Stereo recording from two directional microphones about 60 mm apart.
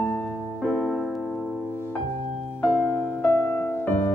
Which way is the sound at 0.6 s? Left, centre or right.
Centre.